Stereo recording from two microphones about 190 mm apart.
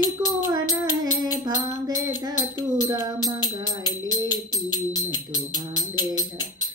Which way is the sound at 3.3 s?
20° left (ahead or behind).